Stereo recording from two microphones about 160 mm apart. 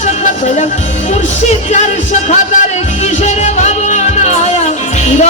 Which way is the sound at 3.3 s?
45° left (ahead or behind).